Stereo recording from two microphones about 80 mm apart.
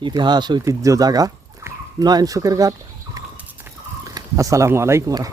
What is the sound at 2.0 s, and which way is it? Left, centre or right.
Speech, right.